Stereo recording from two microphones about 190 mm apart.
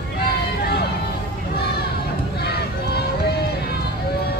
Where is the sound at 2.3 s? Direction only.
60° left (ahead or behind).